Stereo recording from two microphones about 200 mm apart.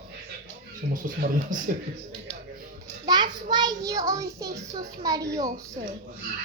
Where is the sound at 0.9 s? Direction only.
40° right (ahead or behind).